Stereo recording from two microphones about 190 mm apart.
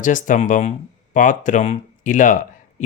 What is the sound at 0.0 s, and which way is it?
Speech, 40° left (ahead or behind).